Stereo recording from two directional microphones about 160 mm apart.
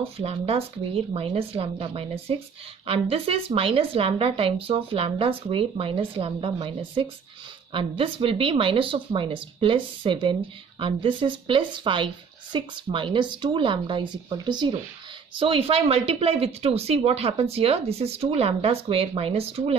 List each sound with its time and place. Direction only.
0.0 s speech: 40° right (ahead or behind)